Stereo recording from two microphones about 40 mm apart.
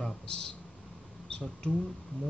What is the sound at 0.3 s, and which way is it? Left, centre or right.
Speech, left.